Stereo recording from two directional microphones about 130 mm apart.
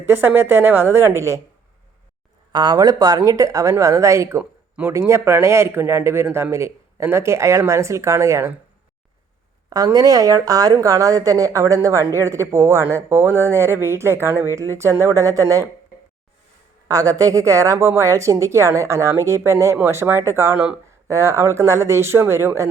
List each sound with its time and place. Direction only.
0.0 s a woman's voice: 15° right (ahead or behind)
2.5 s speech: 35° right (ahead or behind)
9.6 s speech: 30° right (ahead or behind)
16.9 s speech: 25° right (ahead or behind)